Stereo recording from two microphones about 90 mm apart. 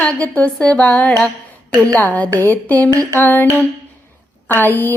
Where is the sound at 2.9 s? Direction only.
40° right (ahead or behind).